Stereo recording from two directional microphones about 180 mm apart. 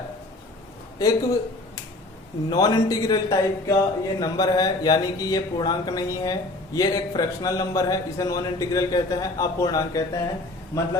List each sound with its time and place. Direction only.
0.9 s speech: 20° left (ahead or behind)
2.5 s speech: 20° left (ahead or behind)